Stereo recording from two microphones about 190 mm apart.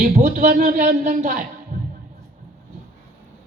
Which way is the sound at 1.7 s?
45° right (ahead or behind).